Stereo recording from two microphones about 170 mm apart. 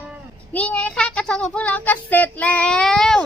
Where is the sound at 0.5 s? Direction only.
10° left (ahead or behind).